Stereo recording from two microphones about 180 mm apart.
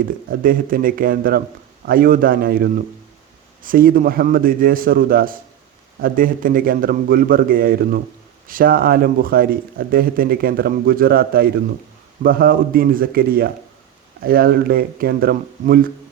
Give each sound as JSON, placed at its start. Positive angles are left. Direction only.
{"t": 0.3, "sound": "a man's voice", "side_deg": -50}